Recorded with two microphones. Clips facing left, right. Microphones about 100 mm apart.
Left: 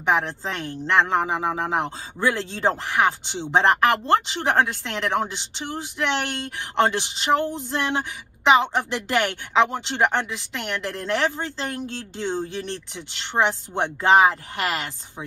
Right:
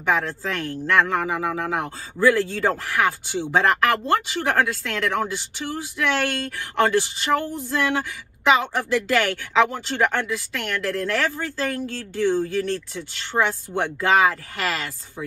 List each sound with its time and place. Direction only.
0.0 s speech: 20° left (ahead or behind)